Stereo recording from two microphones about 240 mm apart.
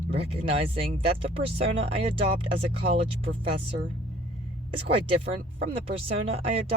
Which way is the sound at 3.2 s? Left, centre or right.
Right.